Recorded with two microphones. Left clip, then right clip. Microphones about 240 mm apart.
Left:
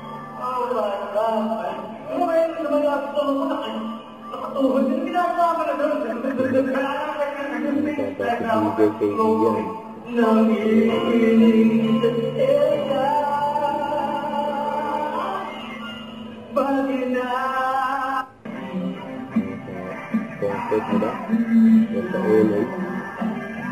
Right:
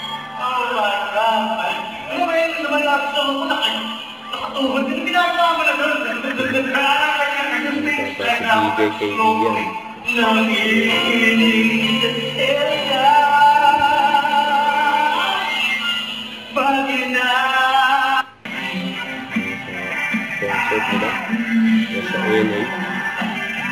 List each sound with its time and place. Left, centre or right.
0.4 s music: centre
4.6 s a man's voice: centre
10.1 s music: centre
16.5 s music: centre
20.1 s music: centre